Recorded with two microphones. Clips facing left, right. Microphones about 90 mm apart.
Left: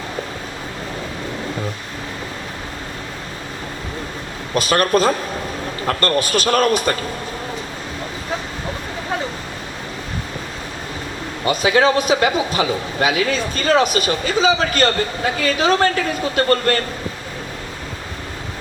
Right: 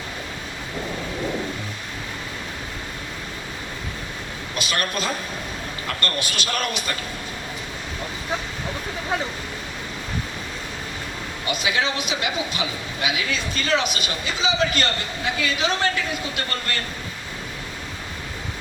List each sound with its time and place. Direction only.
4.5 s a man's voice: 40° left (ahead or behind)
11.4 s speech: 45° left (ahead or behind)